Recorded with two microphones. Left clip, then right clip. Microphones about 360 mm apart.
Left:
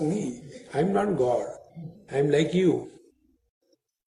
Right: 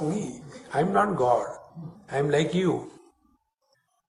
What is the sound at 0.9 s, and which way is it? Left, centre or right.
Speech, left.